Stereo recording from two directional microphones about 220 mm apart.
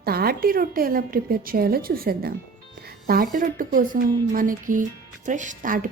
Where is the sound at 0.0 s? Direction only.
45° right (ahead or behind).